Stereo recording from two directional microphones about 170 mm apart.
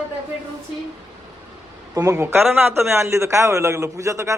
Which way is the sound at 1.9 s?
20° right (ahead or behind).